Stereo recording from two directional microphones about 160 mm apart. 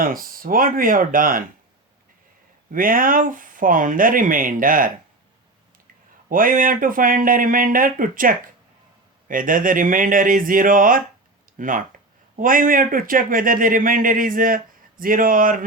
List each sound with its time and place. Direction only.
0.0 s a man's voice: 65° right (ahead or behind)
2.7 s a man's voice: 60° right (ahead or behind)
6.2 s a man's voice: 60° right (ahead or behind)